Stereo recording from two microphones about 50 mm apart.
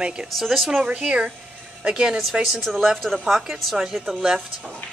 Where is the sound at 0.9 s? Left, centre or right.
Centre.